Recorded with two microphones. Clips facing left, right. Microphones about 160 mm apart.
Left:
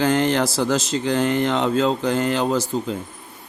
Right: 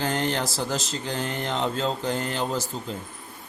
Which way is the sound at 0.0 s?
90° left.